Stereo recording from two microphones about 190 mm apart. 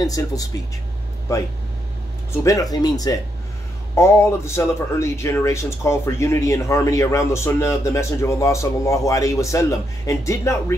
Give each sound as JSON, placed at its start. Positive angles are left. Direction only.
{"t": 0.0, "sound": "speech", "side_deg": 20}
{"t": 2.4, "sound": "speech", "side_deg": 20}